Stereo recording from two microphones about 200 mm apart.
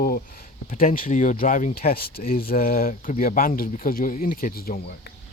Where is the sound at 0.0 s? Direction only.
45° left (ahead or behind).